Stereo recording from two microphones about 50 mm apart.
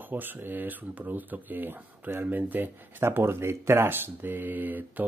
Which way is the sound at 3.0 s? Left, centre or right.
Right.